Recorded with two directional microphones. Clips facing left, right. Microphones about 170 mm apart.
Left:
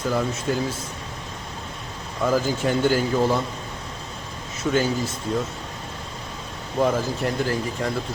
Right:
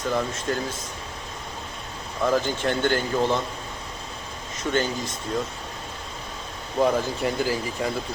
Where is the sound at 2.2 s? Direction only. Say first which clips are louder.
Left 1 dB; 5° left (ahead or behind).